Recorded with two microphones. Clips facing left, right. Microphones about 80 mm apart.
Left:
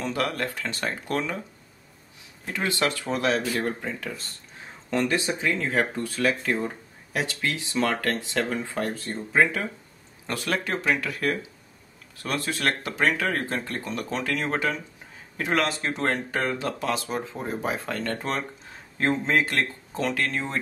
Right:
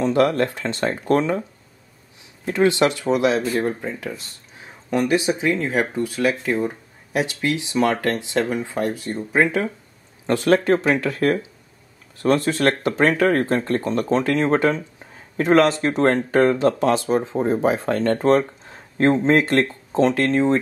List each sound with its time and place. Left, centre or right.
0.0 s speech: right
2.4 s speech: right